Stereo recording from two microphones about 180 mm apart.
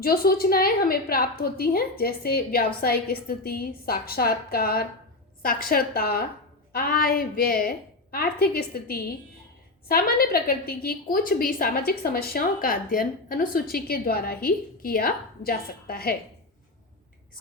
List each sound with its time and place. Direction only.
0.0 s a woman's voice: 55° left (ahead or behind)